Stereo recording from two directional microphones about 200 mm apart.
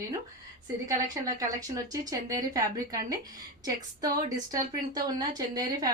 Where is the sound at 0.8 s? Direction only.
15° right (ahead or behind).